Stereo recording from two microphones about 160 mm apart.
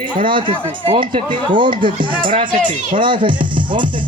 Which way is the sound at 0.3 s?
30° right (ahead or behind).